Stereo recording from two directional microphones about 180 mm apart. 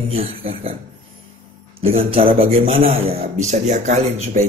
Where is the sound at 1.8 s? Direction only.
35° right (ahead or behind).